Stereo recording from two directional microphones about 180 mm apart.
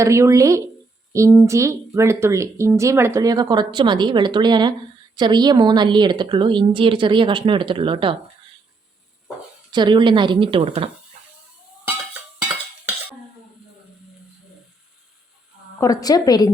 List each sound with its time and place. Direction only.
0.0 s a woman's voice: 15° right (ahead or behind)
9.7 s a woman's voice: 25° right (ahead or behind)
15.8 s a woman's voice: 20° left (ahead or behind)